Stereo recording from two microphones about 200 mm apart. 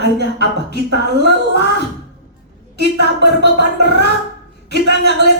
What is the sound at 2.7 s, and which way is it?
Speech, 55° right (ahead or behind).